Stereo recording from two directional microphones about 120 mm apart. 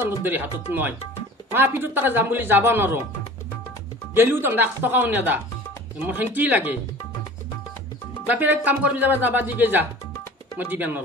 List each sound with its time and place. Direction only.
0.0 s speech: 15° right (ahead or behind)
4.1 s speech: 15° right (ahead or behind)
8.3 s speech: 15° right (ahead or behind)